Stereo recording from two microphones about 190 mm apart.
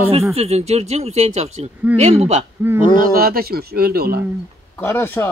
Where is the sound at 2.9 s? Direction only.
50° right (ahead or behind).